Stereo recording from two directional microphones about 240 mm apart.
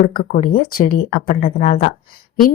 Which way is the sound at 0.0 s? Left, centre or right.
Left.